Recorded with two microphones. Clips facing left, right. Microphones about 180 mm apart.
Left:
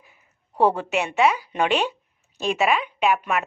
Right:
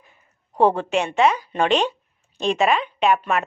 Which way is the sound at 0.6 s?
10° left (ahead or behind).